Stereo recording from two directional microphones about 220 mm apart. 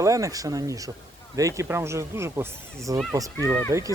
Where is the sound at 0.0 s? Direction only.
15° right (ahead or behind).